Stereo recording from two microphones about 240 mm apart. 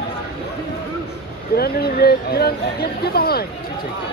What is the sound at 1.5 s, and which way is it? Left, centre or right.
Speech, left.